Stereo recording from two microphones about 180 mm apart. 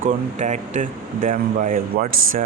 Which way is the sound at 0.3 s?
40° right (ahead or behind).